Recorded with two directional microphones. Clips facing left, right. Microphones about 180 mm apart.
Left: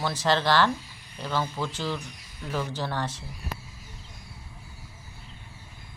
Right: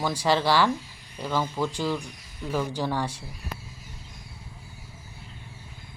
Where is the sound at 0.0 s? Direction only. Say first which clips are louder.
Right 1 dB; 10° right (ahead or behind).